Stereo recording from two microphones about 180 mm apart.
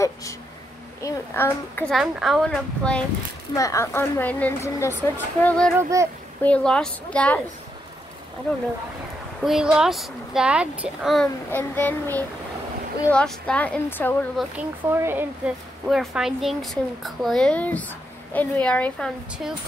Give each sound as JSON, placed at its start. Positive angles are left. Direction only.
{"t": 0.0, "sound": "a sound", "side_deg": 15}
{"t": 1.0, "sound": "a woman's voice", "side_deg": 10}
{"t": 2.0, "sound": "speech", "side_deg": 0}
{"t": 3.5, "sound": "a woman's voice", "side_deg": 15}
{"t": 5.8, "sound": "speech", "side_deg": -15}
{"t": 6.4, "sound": "a woman's voice", "side_deg": 5}
{"t": 9.4, "sound": "speech", "side_deg": -5}
{"t": 11.5, "sound": "a woman's voice", "side_deg": 10}
{"t": 14.4, "sound": "speech", "side_deg": 0}
{"t": 14.9, "sound": "speech", "side_deg": -15}